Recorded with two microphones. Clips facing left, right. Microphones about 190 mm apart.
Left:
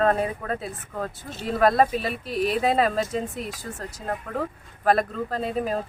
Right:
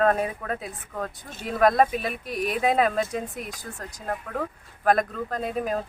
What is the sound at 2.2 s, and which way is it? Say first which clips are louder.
Speech: left 6 dB; 30° left (ahead or behind).